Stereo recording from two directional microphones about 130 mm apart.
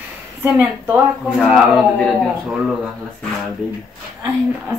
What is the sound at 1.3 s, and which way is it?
Speech, centre (ahead or behind).